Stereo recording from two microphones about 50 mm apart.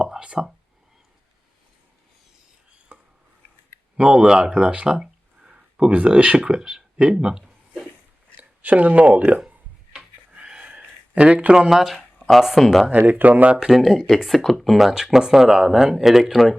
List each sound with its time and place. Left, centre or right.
0.0 s a sound: centre
2.9 s chopping: centre
3.9 s speech: right
8.4 s speech: right
9.5 s a sound: right
11.7 s speech: centre
13.1 s speech: right
13.6 s speech: centre